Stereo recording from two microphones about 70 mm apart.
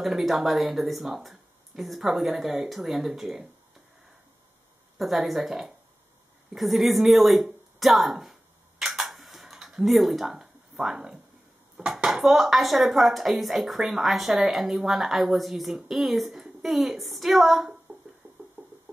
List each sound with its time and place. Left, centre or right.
0.0 s a woman's voice: centre
4.9 s a woman's voice: centre
7.8 s typing: centre
11.7 s a woman's voice: centre
18.2 s a sound: right